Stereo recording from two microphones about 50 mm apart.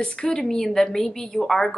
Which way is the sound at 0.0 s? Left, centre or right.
Centre.